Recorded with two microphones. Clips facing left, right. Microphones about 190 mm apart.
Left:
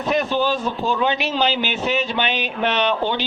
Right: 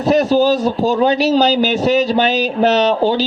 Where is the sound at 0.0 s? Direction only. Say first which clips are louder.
Right 8 dB; 35° right (ahead or behind).